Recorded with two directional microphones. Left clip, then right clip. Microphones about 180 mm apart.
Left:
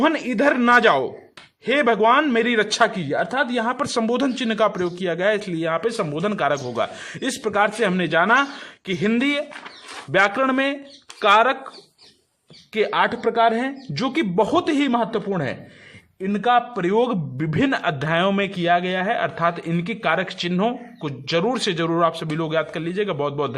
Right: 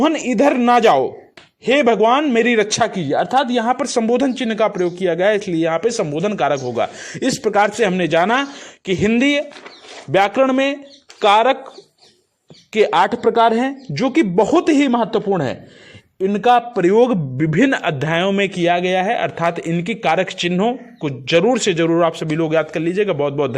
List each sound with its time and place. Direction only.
0.0 s speech: 15° right (ahead or behind)
12.7 s speech: 20° right (ahead or behind)